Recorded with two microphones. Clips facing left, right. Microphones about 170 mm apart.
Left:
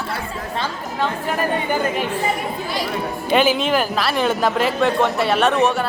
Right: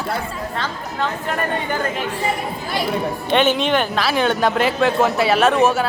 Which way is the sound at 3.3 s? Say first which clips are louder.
Even; 5° left (ahead or behind).